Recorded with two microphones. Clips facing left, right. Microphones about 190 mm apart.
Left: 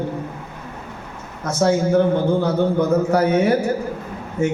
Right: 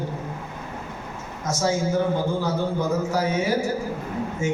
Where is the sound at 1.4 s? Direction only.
60° left (ahead or behind).